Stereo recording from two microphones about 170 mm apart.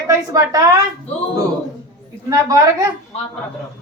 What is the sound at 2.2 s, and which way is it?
Speech, 20° right (ahead or behind).